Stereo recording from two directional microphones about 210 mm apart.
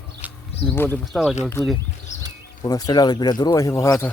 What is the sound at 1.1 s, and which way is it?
Speech, centre (ahead or behind).